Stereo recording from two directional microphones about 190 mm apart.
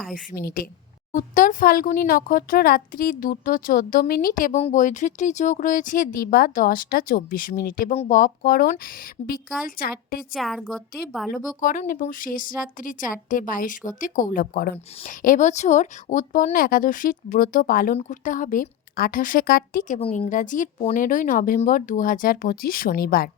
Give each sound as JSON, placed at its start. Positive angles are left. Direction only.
{"t": 0.1, "sound": "a woman's voice", "side_deg": 50}
{"t": 10.3, "sound": "a woman's voice", "side_deg": 0}
{"t": 11.6, "sound": "a woman's voice", "side_deg": 45}
{"t": 20.0, "sound": "a woman's voice", "side_deg": 30}